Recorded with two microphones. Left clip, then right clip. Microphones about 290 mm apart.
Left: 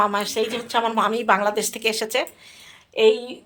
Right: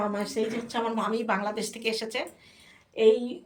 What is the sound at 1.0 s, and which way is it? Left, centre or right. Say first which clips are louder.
A woman's voice: left 9 dB; centre.